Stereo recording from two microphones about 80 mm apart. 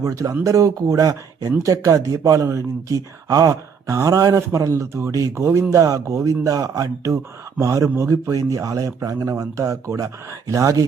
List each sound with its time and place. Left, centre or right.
0.0 s a man's voice: right